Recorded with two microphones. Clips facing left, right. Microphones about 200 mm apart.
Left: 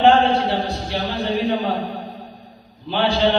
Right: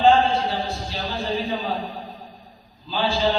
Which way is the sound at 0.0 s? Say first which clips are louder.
Left 3 dB; 65° left (ahead or behind).